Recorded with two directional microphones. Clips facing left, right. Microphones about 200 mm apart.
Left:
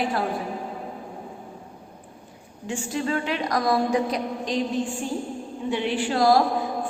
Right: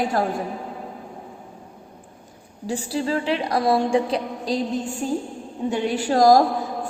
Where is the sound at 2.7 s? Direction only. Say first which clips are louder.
Right 2 dB; 35° right (ahead or behind).